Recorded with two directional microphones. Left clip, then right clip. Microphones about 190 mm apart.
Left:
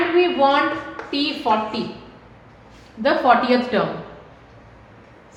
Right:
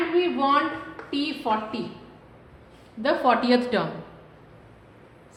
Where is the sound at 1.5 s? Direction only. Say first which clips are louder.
Left 6 dB; 40° right (ahead or behind).